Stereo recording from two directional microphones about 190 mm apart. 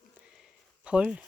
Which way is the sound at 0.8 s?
5° right (ahead or behind).